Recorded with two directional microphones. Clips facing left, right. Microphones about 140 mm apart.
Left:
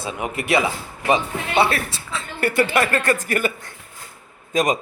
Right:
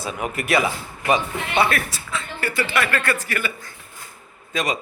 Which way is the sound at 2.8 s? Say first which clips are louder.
Left 3 dB; 40° left (ahead or behind).